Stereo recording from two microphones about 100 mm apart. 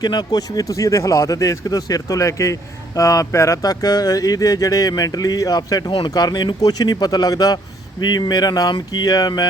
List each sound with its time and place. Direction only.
0.0 s speech: 50° left (ahead or behind)